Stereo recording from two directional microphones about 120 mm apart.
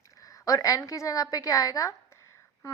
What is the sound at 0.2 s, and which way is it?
A woman's voice, 30° left (ahead or behind).